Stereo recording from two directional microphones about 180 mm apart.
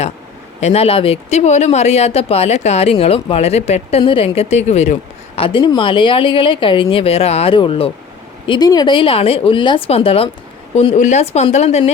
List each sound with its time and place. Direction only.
0.6 s speech: 35° left (ahead or behind)
5.4 s speech: 30° left (ahead or behind)